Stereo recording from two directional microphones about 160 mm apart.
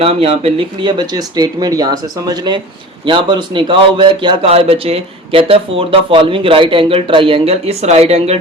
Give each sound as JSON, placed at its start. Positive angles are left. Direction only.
{"t": 0.0, "sound": "a man's voice", "side_deg": -40}